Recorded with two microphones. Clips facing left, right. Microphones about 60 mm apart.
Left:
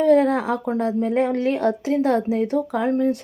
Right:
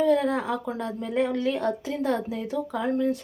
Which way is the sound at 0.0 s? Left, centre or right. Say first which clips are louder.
Left 6 dB; left.